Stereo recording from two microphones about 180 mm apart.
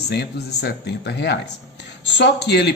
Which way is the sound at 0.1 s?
65° left (ahead or behind).